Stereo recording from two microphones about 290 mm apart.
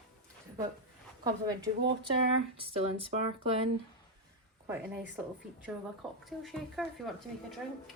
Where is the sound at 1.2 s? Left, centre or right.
Centre.